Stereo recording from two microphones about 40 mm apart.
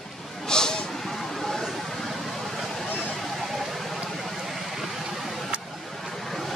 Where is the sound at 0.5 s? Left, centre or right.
Centre.